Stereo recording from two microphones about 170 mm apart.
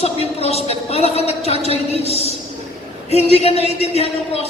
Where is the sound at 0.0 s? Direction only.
35° left (ahead or behind).